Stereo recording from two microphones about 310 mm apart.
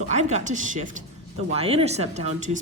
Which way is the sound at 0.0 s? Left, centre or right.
Right.